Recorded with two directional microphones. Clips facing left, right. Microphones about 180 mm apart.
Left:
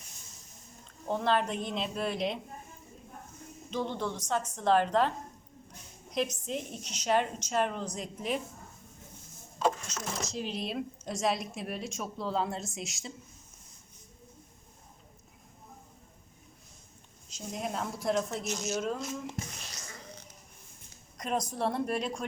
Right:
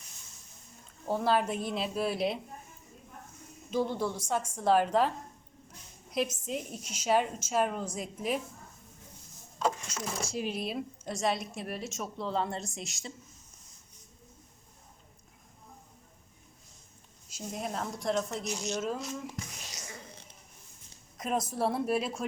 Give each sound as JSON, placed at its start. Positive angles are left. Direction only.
{"t": 1.0, "sound": "speech", "side_deg": -5}
{"t": 3.7, "sound": "a woman's voice", "side_deg": -10}
{"t": 9.9, "sound": "speech", "side_deg": -10}
{"t": 17.2, "sound": "speech", "side_deg": -5}
{"t": 19.7, "sound": "a sound", "side_deg": -25}
{"t": 21.2, "sound": "speech", "side_deg": -5}